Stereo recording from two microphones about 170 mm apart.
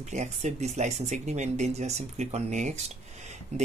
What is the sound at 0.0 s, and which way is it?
Speech, 45° right (ahead or behind).